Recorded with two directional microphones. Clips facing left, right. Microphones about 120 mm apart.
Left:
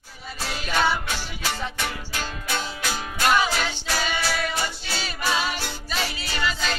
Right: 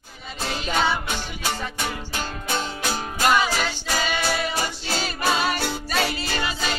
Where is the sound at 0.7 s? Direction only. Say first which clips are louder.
Even; 20° right (ahead or behind).